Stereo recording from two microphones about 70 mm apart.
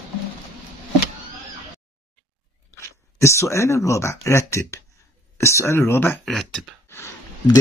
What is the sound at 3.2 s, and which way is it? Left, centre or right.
Speech, left.